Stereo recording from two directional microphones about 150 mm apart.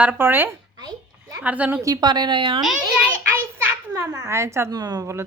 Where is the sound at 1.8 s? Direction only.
25° right (ahead or behind).